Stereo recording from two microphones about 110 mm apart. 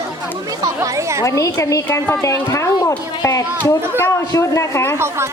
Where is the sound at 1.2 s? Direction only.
30° left (ahead or behind).